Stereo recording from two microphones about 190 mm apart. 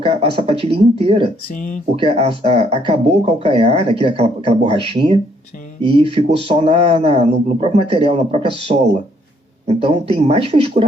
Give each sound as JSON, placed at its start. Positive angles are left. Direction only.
{"t": 0.0, "sound": "speech", "side_deg": -30}
{"t": 1.5, "sound": "speech", "side_deg": 40}
{"t": 2.0, "sound": "speech", "side_deg": -30}